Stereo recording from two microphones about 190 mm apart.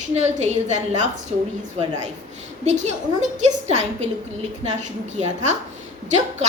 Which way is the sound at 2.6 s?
35° right (ahead or behind).